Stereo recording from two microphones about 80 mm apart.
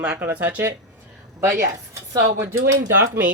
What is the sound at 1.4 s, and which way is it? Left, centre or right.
Speech, right.